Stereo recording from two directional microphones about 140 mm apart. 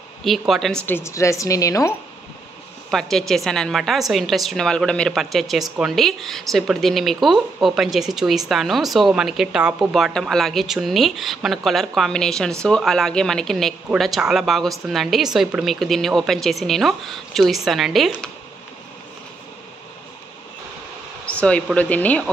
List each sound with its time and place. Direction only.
0.2 s a woman's voice: centre (ahead or behind); by 2.0 s 25° left (ahead or behind)
2.9 s a woman's voice: 5° left (ahead or behind)
21.3 s speech: 10° left (ahead or behind)